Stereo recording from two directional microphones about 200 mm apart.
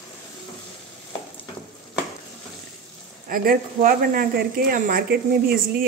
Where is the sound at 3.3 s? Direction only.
45° right (ahead or behind).